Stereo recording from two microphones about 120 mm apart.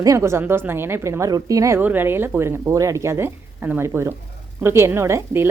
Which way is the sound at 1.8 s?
15° right (ahead or behind).